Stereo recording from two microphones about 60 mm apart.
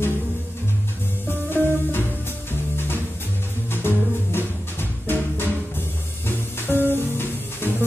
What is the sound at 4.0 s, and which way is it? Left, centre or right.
Music, left.